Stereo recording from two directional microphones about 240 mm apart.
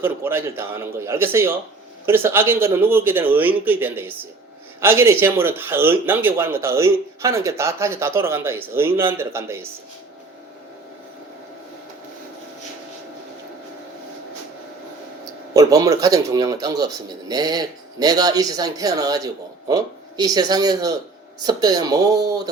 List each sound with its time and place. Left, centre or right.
0.0 s speech: centre
15.5 s speech: centre